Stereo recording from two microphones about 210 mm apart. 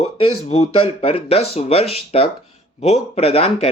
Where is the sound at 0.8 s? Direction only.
25° left (ahead or behind).